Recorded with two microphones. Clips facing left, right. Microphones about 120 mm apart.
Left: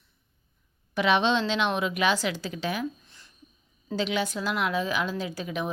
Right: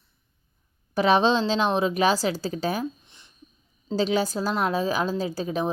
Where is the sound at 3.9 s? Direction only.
35° right (ahead or behind).